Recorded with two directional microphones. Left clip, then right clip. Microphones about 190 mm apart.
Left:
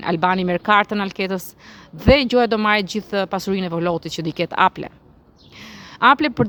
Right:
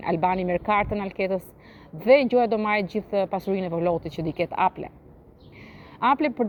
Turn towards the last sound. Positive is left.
turn(degrees=35)  # may be behind; listen again after turning